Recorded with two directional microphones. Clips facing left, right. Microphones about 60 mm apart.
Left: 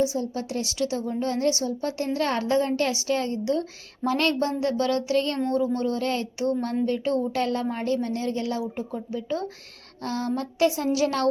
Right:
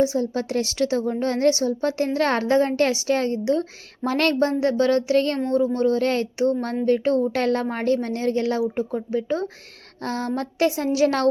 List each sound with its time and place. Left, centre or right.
0.0 s speech: right
0.3 s a woman's voice: right